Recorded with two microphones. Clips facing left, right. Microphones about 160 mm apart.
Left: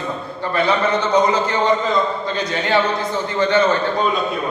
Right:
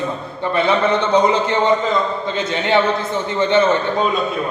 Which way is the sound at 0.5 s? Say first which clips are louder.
Right 2 dB; 25° right (ahead or behind).